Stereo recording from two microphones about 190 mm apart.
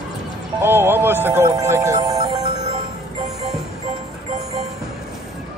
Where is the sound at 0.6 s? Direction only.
10° right (ahead or behind).